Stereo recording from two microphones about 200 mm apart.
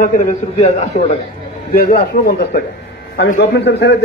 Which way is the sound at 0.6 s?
35° left (ahead or behind).